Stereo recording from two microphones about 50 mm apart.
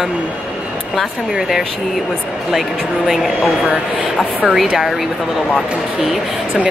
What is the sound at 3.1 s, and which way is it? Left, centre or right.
Speech, centre.